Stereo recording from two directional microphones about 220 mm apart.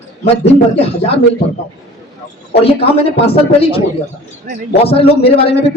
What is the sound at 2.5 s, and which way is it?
Speech, 25° left (ahead or behind).